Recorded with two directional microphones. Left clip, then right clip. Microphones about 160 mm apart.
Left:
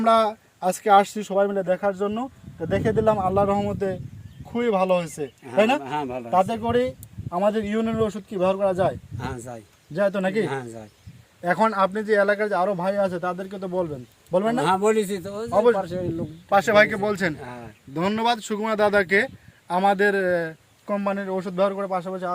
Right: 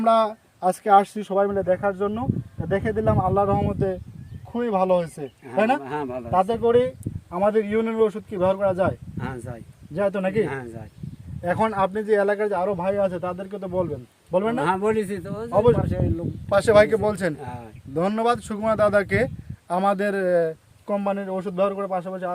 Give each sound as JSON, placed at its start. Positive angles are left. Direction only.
{"t": 0.0, "sound": "a man's voice", "side_deg": -20}
{"t": 5.8, "sound": "a man's voice", "side_deg": 0}
{"t": 6.3, "sound": "a man's voice", "side_deg": -25}
{"t": 9.1, "sound": "a man's voice", "side_deg": 15}
{"t": 9.9, "sound": "a man's voice", "side_deg": -15}
{"t": 10.4, "sound": "a man's voice", "side_deg": 15}
{"t": 11.4, "sound": "a man's voice", "side_deg": -25}
{"t": 14.6, "sound": "a man's voice", "side_deg": 15}
{"t": 16.5, "sound": "speech", "side_deg": -90}
{"t": 20.8, "sound": "a man's voice", "side_deg": -50}